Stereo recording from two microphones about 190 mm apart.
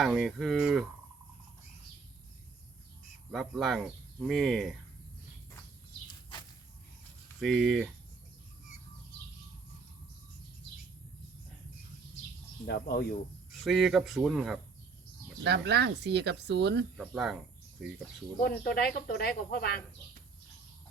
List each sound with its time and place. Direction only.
0.0 s speech: centre (ahead or behind)
3.3 s speech: centre (ahead or behind)
7.3 s speech: centre (ahead or behind)
12.6 s speech: 60° left (ahead or behind)
13.7 s speech: centre (ahead or behind)
15.4 s speech: 60° right (ahead or behind)
17.0 s speech: centre (ahead or behind)
18.3 s speech: 55° left (ahead or behind)